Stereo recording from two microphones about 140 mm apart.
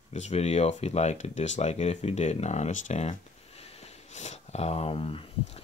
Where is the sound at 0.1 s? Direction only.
55° left (ahead or behind).